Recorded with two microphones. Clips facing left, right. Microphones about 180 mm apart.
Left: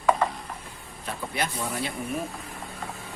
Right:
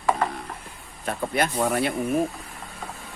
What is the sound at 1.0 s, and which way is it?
Speech, 55° right (ahead or behind).